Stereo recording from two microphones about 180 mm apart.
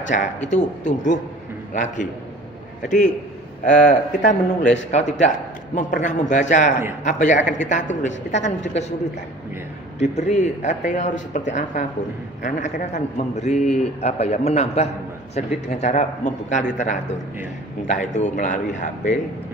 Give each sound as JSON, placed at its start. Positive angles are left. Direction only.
{"t": 0.0, "sound": "a woman's voice", "side_deg": 45}
{"t": 3.6, "sound": "a woman's voice", "side_deg": 45}
{"t": 9.9, "sound": "a man's voice", "side_deg": 40}